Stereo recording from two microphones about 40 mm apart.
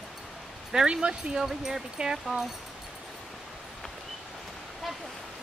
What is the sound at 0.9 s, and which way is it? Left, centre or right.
Speech, centre.